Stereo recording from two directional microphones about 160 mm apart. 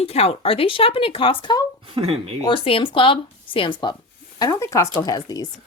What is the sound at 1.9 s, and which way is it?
Speech, 40° right (ahead or behind).